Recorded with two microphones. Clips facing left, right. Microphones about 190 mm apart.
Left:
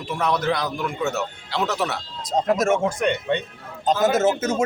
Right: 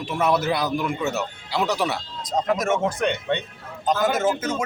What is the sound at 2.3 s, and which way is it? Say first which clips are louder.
Speech: left 3 dB; 25° left (ahead or behind).